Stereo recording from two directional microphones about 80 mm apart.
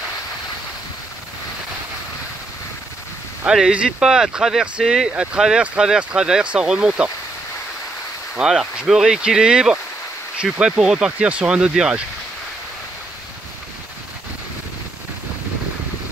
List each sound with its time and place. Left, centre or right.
3.4 s speech: centre
8.4 s speech: centre